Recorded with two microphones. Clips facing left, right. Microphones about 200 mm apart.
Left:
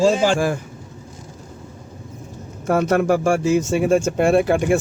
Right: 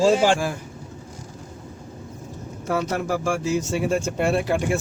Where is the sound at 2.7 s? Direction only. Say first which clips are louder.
Left 7 dB; 55° left (ahead or behind).